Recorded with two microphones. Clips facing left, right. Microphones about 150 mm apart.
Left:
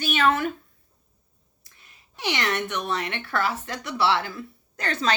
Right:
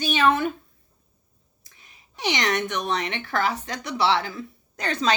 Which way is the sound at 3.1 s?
15° right (ahead or behind).